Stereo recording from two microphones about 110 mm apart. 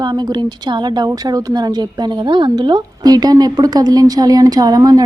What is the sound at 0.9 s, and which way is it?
A woman's voice, 40° right (ahead or behind).